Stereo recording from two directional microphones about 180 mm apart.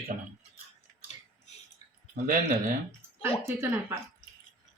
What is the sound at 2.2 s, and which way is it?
Speech, 50° right (ahead or behind).